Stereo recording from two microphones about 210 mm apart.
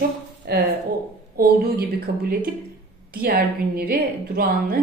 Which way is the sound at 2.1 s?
50° right (ahead or behind).